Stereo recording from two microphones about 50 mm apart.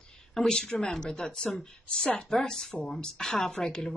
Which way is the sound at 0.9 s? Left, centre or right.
Centre.